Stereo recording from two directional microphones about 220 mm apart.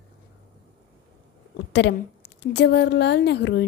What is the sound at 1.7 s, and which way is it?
A woman's voice, 50° left (ahead or behind).